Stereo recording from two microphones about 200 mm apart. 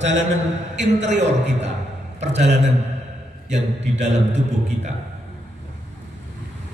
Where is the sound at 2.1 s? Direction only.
35° right (ahead or behind).